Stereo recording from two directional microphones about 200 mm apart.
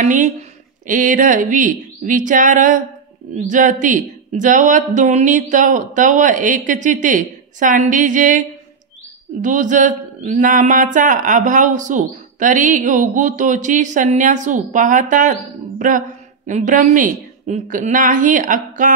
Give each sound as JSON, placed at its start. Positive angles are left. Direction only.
{"t": 0.0, "sound": "a woman's voice", "side_deg": -40}
{"t": 16.4, "sound": "speech", "side_deg": -40}